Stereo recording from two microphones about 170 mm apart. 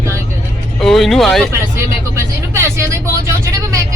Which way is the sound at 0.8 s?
Centre (ahead or behind).